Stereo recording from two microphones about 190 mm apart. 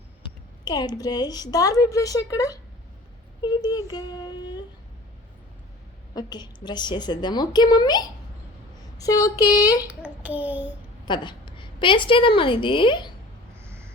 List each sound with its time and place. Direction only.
0.2 s speech: 20° left (ahead or behind)
6.3 s speech: 20° left (ahead or behind)
9.8 s a child's voice: 10° right (ahead or behind)
11.0 s a woman's voice: 25° left (ahead or behind)
13.6 s a sound: 15° right (ahead or behind)